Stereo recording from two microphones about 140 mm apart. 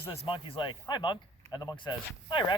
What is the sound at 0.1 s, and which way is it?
Speech, 40° left (ahead or behind).